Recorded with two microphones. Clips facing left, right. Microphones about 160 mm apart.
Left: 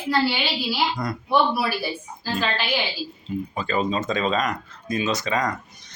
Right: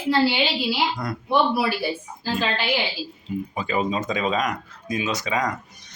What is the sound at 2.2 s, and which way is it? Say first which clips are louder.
A woman's voice: even; 20° right (ahead or behind).